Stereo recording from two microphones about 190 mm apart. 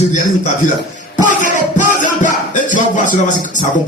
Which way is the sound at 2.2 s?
40° left (ahead or behind).